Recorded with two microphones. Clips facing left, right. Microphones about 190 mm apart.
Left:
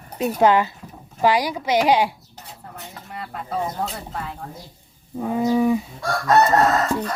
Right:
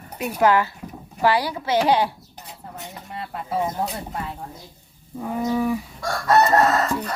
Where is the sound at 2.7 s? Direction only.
20° right (ahead or behind).